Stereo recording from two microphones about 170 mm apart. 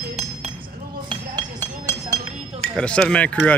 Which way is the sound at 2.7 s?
5° left (ahead or behind).